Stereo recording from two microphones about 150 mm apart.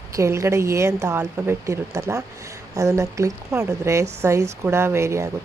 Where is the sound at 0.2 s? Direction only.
20° right (ahead or behind).